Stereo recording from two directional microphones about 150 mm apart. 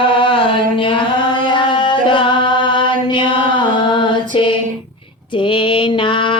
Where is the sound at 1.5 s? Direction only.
30° left (ahead or behind).